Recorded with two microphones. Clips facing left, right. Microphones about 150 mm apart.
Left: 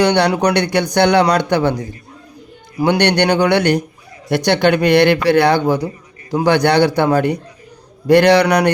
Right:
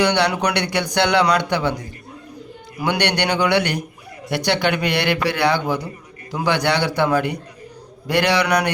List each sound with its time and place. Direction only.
0.1 s a man's voice: 40° left (ahead or behind)
2.7 s a man's voice: 40° left (ahead or behind)